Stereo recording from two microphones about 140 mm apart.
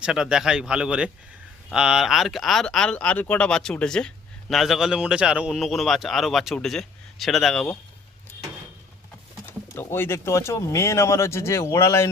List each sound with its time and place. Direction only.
0.0 s speech: 5° right (ahead or behind)
9.7 s speech: 15° left (ahead or behind)